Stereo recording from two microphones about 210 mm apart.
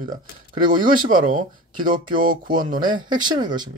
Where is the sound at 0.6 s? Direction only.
20° right (ahead or behind).